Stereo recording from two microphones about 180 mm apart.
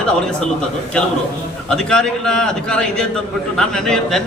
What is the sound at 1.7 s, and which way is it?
A man's voice, 5° left (ahead or behind).